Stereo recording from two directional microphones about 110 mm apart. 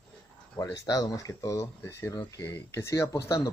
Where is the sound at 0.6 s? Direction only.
30° left (ahead or behind).